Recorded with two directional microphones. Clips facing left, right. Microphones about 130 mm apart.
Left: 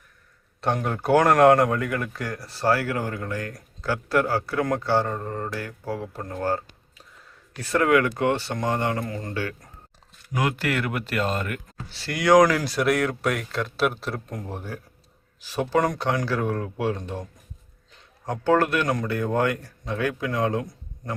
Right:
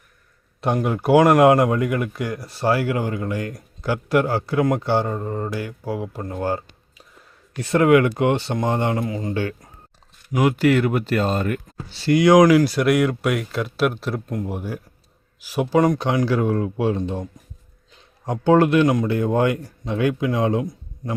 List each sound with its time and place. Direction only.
0.6 s speech: 5° right (ahead or behind)
9.0 s speech: 10° right (ahead or behind)
9.3 s speech: 25° right (ahead or behind)
11.9 s speech: 20° right (ahead or behind)
18.3 s speech: 20° right (ahead or behind)